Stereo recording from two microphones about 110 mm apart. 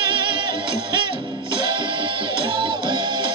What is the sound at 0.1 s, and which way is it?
Music, 45° right (ahead or behind).